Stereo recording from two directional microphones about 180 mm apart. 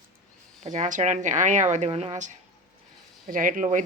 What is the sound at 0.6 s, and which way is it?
Speech, 40° right (ahead or behind).